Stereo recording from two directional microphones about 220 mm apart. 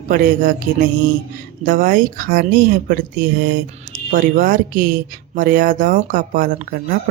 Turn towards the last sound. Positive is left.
turn(degrees=-40)  # may be behind; listen again after turning